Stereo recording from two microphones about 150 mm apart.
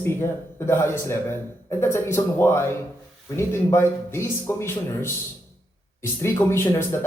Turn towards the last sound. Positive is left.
turn(degrees=15)  # may be behind; listen again after turning